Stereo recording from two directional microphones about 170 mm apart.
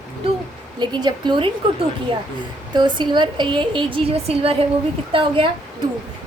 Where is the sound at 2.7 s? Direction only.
25° right (ahead or behind).